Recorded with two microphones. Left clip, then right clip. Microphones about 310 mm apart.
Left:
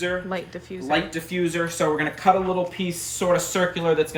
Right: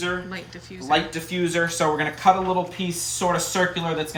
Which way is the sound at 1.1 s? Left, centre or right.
Centre.